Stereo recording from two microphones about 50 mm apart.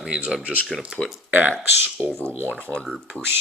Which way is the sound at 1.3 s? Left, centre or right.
Right.